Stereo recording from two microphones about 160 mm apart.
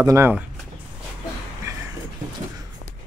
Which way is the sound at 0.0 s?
15° right (ahead or behind).